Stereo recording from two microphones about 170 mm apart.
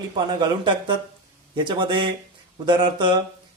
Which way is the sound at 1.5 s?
30° right (ahead or behind).